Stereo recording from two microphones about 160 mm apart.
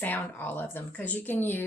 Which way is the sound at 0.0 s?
10° left (ahead or behind).